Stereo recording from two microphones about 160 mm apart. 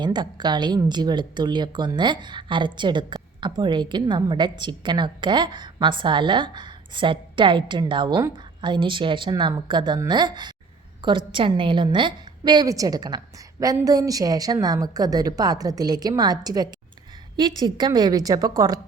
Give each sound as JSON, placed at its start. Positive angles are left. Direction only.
{"t": 0.0, "sound": "a woman's voice", "side_deg": -25}